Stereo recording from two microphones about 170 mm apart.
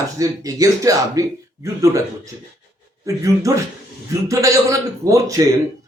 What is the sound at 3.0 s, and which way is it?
Speech, 20° right (ahead or behind).